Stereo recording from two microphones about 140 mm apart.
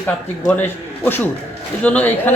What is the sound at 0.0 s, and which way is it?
Speech, 10° left (ahead or behind).